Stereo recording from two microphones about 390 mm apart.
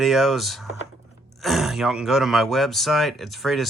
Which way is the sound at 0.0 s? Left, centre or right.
Centre.